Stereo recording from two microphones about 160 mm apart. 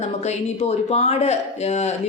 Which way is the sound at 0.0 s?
45° left (ahead or behind).